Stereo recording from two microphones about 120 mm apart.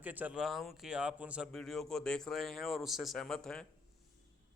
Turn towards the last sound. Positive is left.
turn(degrees=5)  # may be behind; listen again after turning